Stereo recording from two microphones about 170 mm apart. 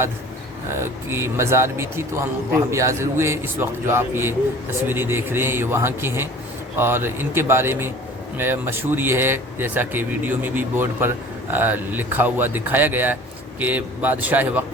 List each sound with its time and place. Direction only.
0.8 s a man's voice: 15° right (ahead or behind)